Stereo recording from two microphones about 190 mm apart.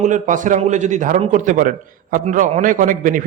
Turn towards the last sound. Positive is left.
turn(degrees=-45)  # may be behind; listen again after turning